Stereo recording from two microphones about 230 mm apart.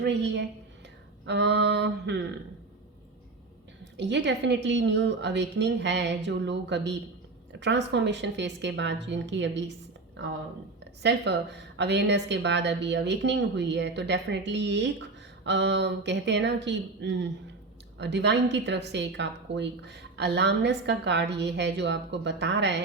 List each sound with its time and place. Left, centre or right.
0.0 s a woman's voice: right
3.9 s a woman's voice: right
11.0 s a woman's voice: right